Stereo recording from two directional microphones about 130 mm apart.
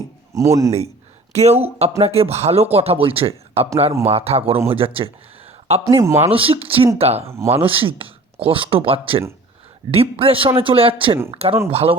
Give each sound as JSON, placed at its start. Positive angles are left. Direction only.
{"t": 0.3, "sound": "a man's voice", "side_deg": -25}
{"t": 1.3, "sound": "speech", "side_deg": -55}
{"t": 5.9, "sound": "a man's voice", "side_deg": -20}
{"t": 6.2, "sound": "speech", "side_deg": -45}